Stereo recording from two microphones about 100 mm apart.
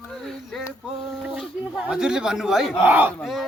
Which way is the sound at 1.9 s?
5° right (ahead or behind).